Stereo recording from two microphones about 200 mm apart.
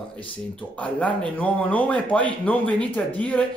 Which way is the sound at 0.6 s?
5° left (ahead or behind).